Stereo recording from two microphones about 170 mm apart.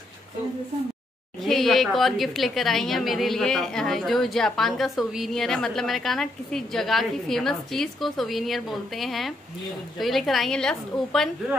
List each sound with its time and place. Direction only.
1.4 s a woman's voice: centre (ahead or behind)